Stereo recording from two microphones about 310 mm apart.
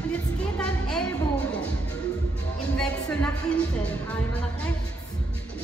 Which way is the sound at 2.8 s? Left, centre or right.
Centre.